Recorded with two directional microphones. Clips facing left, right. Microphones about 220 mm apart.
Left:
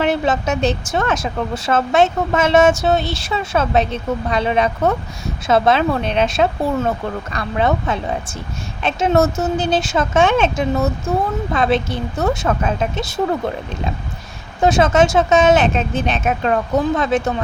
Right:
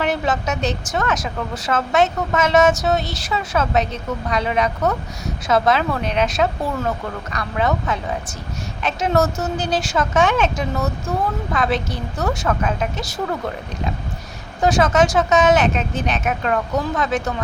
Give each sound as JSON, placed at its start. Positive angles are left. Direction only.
{"t": 0.0, "sound": "speech", "side_deg": 25}
{"t": 14.6, "sound": "speech", "side_deg": 25}